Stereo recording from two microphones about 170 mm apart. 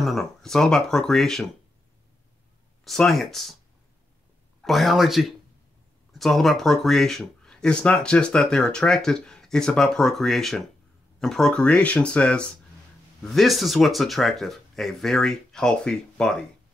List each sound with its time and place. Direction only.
0.0 s speech: centre (ahead or behind)
2.8 s speech: centre (ahead or behind)
4.6 s speech: centre (ahead or behind)